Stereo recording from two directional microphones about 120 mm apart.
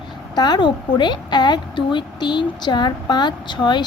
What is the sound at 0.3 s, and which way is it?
A woman's voice, 35° left (ahead or behind).